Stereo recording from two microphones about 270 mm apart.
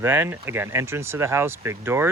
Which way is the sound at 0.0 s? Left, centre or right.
Centre.